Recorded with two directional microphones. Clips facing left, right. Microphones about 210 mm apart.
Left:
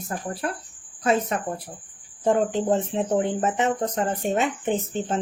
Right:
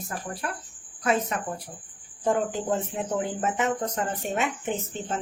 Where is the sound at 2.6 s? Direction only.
25° left (ahead or behind).